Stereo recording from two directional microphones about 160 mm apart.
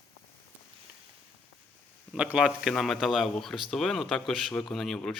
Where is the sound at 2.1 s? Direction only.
5° right (ahead or behind).